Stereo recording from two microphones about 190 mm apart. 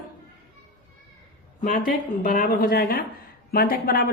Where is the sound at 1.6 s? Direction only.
45° left (ahead or behind).